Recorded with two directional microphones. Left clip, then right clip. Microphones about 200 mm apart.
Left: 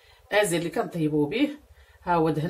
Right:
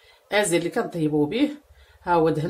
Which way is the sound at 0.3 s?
15° right (ahead or behind).